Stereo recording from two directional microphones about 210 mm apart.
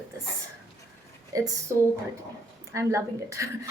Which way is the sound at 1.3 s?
15° right (ahead or behind).